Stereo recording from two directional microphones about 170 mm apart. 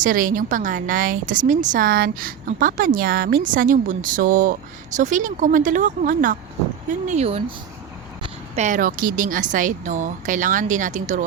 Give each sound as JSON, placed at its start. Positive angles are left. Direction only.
{"t": 0.0, "sound": "a woman's voice", "side_deg": -55}
{"t": 7.1, "sound": "speech", "side_deg": -40}
{"t": 8.5, "sound": "a woman's voice", "side_deg": -50}